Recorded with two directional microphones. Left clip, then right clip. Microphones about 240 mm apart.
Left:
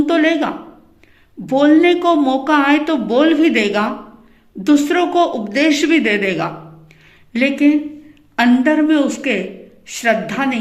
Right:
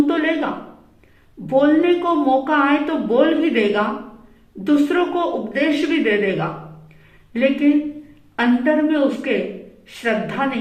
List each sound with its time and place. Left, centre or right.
0.0 s a woman's voice: left